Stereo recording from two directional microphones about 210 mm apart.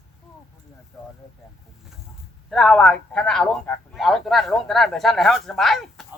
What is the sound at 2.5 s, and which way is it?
A man's voice, centre (ahead or behind).